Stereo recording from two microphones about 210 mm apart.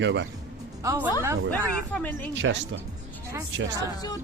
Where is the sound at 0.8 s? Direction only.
10° right (ahead or behind).